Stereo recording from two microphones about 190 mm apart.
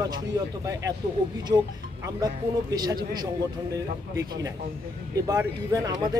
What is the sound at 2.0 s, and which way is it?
Speech, 20° right (ahead or behind).